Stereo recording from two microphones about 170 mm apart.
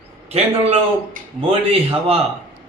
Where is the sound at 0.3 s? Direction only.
35° right (ahead or behind).